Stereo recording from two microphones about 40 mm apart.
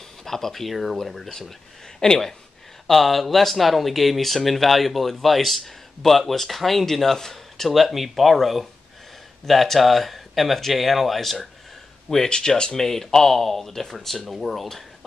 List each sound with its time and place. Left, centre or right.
0.2 s speech: centre
2.9 s speech: centre
12.3 s speech: left
12.7 s speech: centre